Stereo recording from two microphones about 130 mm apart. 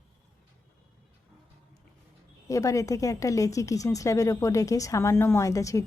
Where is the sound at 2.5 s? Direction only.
25° left (ahead or behind).